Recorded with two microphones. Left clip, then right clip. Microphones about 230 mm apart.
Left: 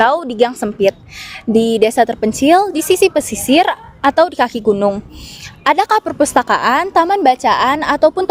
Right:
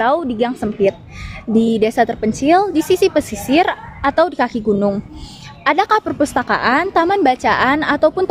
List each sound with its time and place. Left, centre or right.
0.0 s a woman's voice: left